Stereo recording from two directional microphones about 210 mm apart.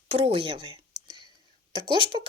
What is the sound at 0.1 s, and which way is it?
Speech, 25° right (ahead or behind).